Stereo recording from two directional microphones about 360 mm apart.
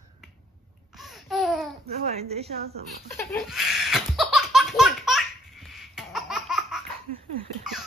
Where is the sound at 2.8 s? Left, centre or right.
Centre.